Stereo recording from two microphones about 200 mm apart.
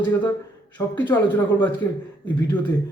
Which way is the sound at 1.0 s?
10° left (ahead or behind).